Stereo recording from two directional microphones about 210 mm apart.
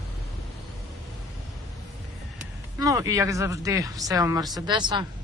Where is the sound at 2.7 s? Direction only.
15° right (ahead or behind).